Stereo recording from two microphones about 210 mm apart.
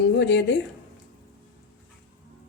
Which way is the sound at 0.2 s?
55° left (ahead or behind).